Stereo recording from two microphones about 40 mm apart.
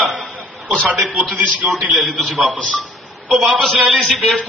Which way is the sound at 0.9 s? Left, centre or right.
Centre.